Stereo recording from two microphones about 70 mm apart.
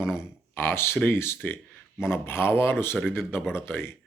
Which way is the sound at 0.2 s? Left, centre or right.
Left.